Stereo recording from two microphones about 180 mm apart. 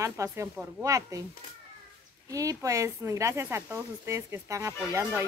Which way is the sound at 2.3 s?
20° right (ahead or behind).